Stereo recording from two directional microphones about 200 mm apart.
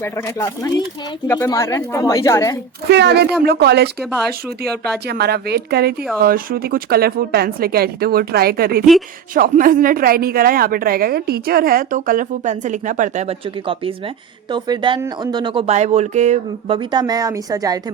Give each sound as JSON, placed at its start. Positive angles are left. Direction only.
{"t": 0.0, "sound": "speech", "side_deg": 15}
{"t": 2.9, "sound": "a woman's voice", "side_deg": -60}